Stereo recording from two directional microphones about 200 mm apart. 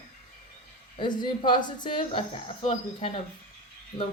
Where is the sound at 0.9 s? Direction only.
25° left (ahead or behind).